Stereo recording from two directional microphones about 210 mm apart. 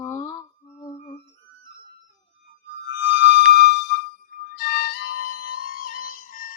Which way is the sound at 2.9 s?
60° left (ahead or behind).